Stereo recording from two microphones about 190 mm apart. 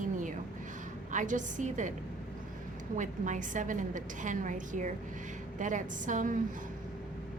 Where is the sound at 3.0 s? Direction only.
40° right (ahead or behind).